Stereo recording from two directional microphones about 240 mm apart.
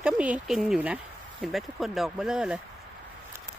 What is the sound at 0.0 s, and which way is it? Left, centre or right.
Speech, centre.